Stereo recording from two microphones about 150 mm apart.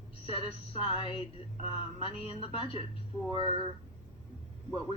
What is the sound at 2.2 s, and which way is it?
Speech, 40° left (ahead or behind).